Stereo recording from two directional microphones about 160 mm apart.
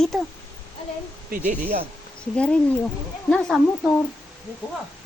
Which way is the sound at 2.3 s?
5° left (ahead or behind).